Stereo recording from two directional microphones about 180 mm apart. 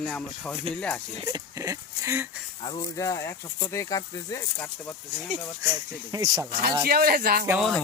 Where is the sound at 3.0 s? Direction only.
15° left (ahead or behind).